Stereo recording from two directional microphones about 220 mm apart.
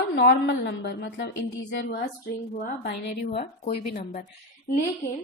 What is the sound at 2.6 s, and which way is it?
Speech, 45° left (ahead or behind).